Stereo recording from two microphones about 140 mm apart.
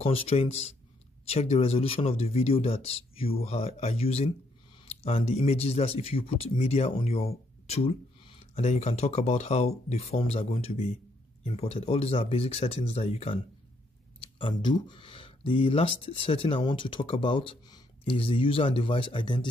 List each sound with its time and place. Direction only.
0.0 s speech: 45° left (ahead or behind)
14.2 s speech: 35° left (ahead or behind)